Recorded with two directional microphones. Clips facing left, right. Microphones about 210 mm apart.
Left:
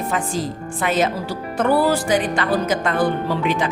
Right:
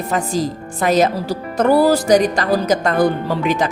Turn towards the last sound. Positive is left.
turn(degrees=-40)  # may be behind; listen again after turning